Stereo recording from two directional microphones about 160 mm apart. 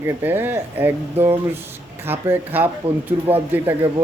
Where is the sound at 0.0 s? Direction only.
15° right (ahead or behind).